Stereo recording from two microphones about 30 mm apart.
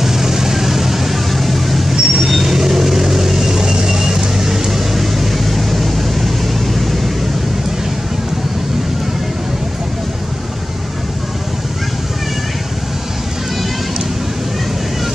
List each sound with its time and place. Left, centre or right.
0.0 s vehicle: centre
2.0 s vehicle: centre